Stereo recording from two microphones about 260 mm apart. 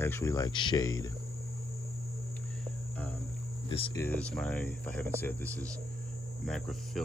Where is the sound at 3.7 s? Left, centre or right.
Left.